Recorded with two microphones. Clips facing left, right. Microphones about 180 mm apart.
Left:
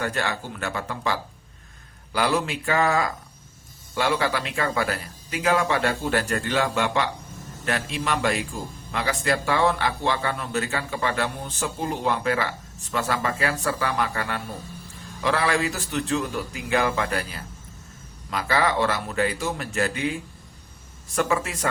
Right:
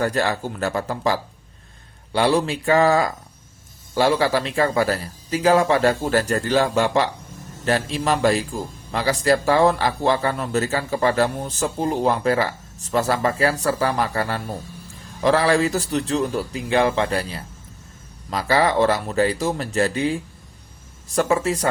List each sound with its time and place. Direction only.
0.0 s a man's voice: 35° right (ahead or behind)